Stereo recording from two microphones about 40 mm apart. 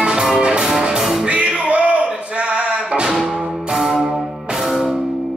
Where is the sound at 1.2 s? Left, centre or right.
Right.